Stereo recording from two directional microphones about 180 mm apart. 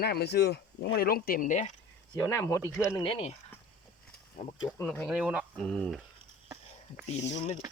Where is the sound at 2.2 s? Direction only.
15° left (ahead or behind).